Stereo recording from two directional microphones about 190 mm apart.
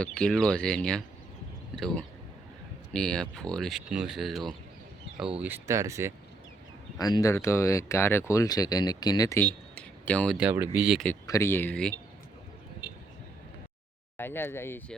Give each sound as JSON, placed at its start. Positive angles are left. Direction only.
{"t": 0.0, "sound": "speech", "side_deg": 5}
{"t": 5.4, "sound": "speech", "side_deg": -15}
{"t": 7.0, "sound": "speech", "side_deg": 20}
{"t": 9.7, "sound": "a sound", "side_deg": 5}
{"t": 10.3, "sound": "speech", "side_deg": -10}
{"t": 11.3, "sound": "speech", "side_deg": 15}
{"t": 14.2, "sound": "speech", "side_deg": 10}